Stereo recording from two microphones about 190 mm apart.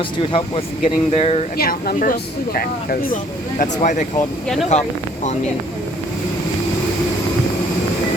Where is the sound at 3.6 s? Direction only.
40° left (ahead or behind).